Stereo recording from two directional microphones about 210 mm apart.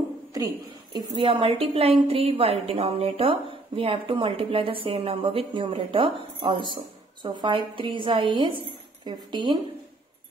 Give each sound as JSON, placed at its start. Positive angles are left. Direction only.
{"t": 0.9, "sound": "a woman's voice", "side_deg": -20}